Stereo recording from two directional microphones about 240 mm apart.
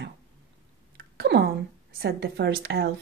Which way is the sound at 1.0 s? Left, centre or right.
Right.